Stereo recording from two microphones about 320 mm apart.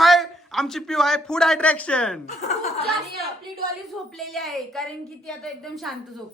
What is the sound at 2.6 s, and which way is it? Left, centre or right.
Chuckle, centre.